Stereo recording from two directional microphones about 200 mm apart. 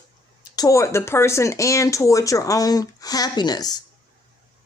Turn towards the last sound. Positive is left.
turn(degrees=20)  # may be behind; listen again after turning